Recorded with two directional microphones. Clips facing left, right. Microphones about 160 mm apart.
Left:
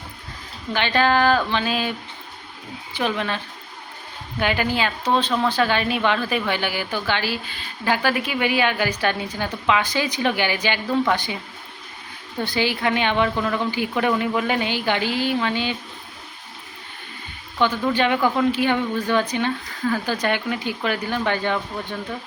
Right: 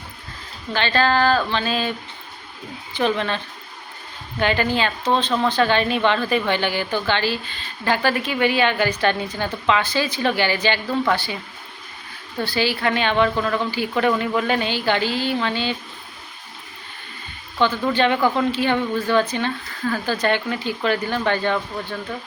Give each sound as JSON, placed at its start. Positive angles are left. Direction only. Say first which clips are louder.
{"t": 0.7, "sound": "a woman's voice", "louder": "even", "side_deg": 15}
{"t": 12.5, "sound": "a woman's voice", "louder": "right 1 dB", "side_deg": 20}
{"t": 17.6, "sound": "a woman's voice", "louder": "right 1 dB", "side_deg": 10}